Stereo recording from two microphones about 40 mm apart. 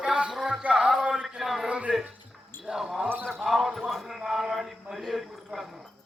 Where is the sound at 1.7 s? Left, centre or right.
Right.